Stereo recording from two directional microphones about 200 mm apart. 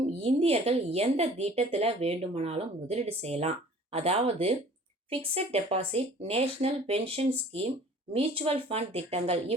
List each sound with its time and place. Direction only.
0.2 s speech: 30° right (ahead or behind)